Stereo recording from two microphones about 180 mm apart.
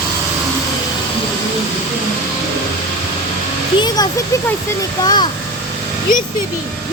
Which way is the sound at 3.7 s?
20° left (ahead or behind).